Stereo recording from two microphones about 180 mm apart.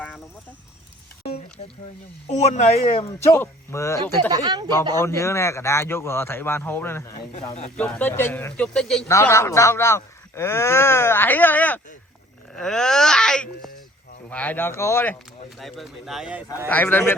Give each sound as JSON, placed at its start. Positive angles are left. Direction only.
{"t": 2.3, "sound": "a man's voice", "side_deg": 40}
{"t": 3.3, "sound": "speech", "side_deg": 15}
{"t": 4.3, "sound": "speech", "side_deg": -20}
{"t": 4.9, "sound": "speech", "side_deg": 15}
{"t": 9.0, "sound": "speech", "side_deg": 15}
{"t": 15.4, "sound": "speech", "side_deg": 0}
{"t": 16.6, "sound": "speech", "side_deg": 10}